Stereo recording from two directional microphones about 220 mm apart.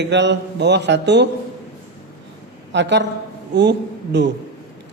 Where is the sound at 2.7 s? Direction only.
55° right (ahead or behind).